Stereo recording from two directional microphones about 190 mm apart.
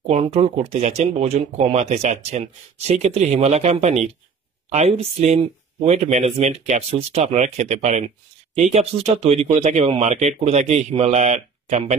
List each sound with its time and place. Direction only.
0.0 s speech: 35° right (ahead or behind)